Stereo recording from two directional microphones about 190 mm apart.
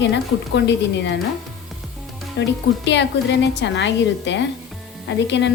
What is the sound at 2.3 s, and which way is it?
A woman's voice, 70° left (ahead or behind).